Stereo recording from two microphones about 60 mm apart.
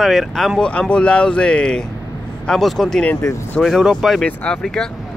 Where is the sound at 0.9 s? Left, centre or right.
Centre.